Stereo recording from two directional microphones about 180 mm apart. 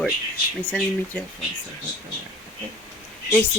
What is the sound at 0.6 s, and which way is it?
Speech, 5° left (ahead or behind).